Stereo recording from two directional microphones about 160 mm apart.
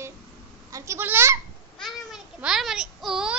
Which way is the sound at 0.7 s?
20° right (ahead or behind).